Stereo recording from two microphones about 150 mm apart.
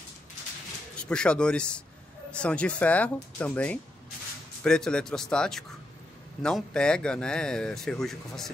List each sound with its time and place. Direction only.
0.9 s speech: 5° left (ahead or behind)